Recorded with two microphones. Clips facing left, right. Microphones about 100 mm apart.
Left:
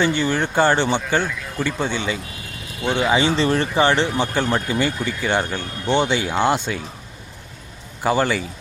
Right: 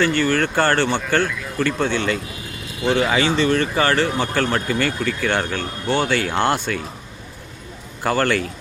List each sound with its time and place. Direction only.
0.0 s speech: 20° left (ahead or behind)
3.1 s speech: 25° left (ahead or behind); by 6.6 s 10° left (ahead or behind)
8.0 s speech: 15° left (ahead or behind)